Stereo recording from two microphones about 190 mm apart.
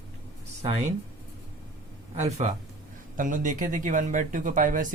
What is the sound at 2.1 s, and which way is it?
Speech, 40° right (ahead or behind).